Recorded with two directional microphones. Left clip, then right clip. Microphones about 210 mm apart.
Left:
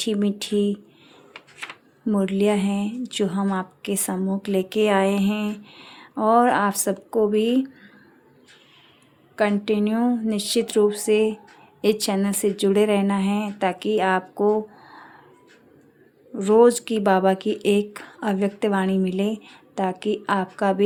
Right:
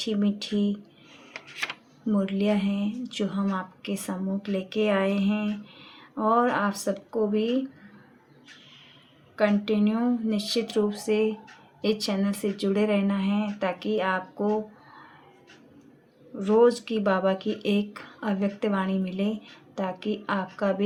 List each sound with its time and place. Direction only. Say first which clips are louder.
0.0 s speech: left 4 dB; 45° left (ahead or behind)
2.0 s speech: left 5 dB; 45° left (ahead or behind)
9.3 s speech: left 3 dB; 40° left (ahead or behind)
16.4 s speech: left 5 dB; 50° left (ahead or behind)